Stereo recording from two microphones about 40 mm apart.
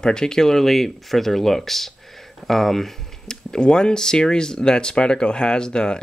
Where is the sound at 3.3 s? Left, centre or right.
Centre.